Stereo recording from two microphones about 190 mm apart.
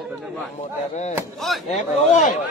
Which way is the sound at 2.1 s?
40° left (ahead or behind).